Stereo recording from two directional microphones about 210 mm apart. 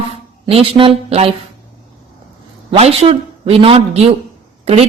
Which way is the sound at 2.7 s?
30° right (ahead or behind).